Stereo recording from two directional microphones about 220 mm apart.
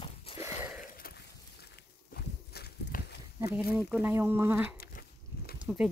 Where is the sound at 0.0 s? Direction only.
25° left (ahead or behind).